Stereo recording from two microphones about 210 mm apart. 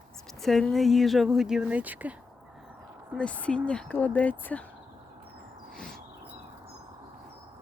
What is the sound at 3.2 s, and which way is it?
Speech, 5° left (ahead or behind).